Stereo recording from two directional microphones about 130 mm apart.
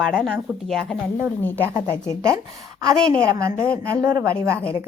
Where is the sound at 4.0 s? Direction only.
20° right (ahead or behind).